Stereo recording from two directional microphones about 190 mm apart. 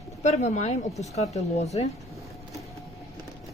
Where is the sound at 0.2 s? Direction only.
35° left (ahead or behind).